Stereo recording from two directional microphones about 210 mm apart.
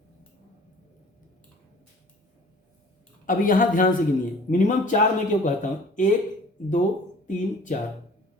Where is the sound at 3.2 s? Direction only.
40° left (ahead or behind).